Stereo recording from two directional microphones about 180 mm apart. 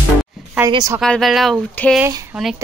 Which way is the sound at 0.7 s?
20° right (ahead or behind).